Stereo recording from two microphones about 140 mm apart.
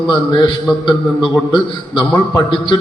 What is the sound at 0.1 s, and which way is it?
Speech, 35° left (ahead or behind).